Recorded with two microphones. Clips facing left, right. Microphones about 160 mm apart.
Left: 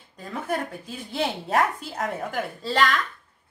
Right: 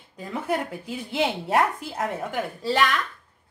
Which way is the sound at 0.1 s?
15° right (ahead or behind).